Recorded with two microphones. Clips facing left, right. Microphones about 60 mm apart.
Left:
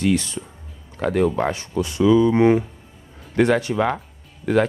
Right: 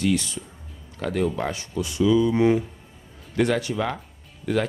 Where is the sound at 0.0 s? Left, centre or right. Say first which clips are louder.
Left 3 dB; left.